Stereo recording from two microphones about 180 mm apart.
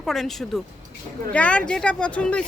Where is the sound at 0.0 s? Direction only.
Centre (ahead or behind).